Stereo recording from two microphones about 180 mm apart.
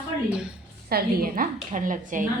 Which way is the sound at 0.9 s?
55° right (ahead or behind).